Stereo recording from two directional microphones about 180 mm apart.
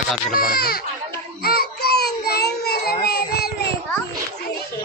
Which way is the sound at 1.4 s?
60° left (ahead or behind).